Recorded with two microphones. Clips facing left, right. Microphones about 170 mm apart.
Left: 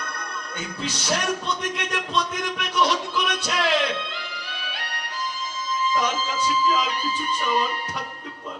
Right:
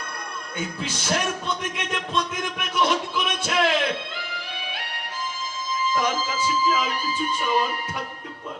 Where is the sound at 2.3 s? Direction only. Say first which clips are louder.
Left 1 dB; 50° right (ahead or behind).